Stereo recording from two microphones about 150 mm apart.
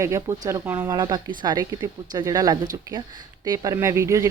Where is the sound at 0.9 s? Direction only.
25° right (ahead or behind).